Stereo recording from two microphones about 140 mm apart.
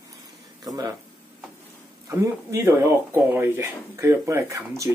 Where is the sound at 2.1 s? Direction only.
20° right (ahead or behind).